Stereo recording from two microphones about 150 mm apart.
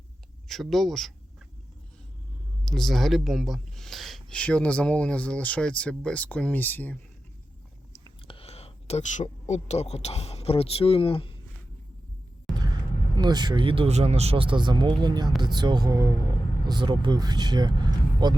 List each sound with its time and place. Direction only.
0.4 s speech: centre (ahead or behind)
2.6 s speech: centre (ahead or behind)
8.3 s speech: 40° left (ahead or behind)
12.5 s vehicle: centre (ahead or behind)
13.1 s speech: 30° right (ahead or behind)